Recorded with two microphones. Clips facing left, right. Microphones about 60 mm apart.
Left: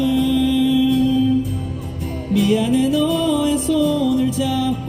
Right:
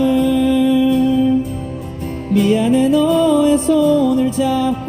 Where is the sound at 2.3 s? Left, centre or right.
Right.